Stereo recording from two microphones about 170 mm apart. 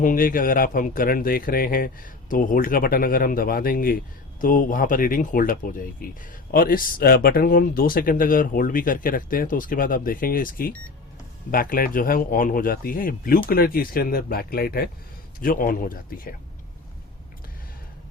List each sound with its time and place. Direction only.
0.0 s a man's voice: 55° left (ahead or behind)